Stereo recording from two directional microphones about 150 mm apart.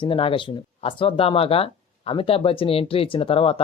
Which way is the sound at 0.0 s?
35° left (ahead or behind).